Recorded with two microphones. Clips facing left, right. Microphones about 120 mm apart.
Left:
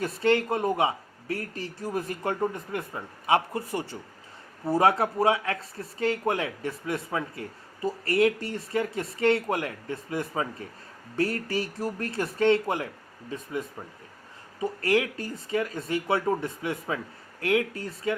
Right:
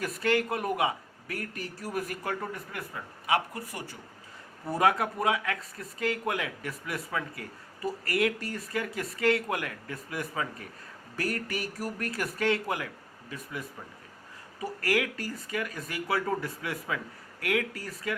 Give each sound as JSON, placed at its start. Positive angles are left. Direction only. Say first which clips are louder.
{"t": 0.0, "sound": "speech", "louder": "left 4 dB", "side_deg": 30}